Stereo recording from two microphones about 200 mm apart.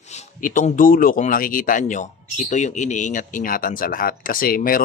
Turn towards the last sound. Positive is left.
turn(degrees=45)  # may be behind; listen again after turning